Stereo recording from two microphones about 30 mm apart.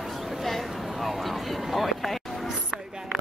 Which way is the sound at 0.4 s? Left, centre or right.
Centre.